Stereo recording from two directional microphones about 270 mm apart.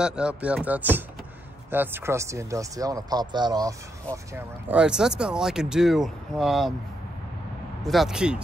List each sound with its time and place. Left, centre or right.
0.0 s speech: centre
7.8 s speech: centre